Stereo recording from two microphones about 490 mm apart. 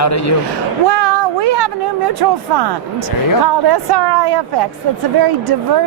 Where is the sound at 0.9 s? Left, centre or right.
Right.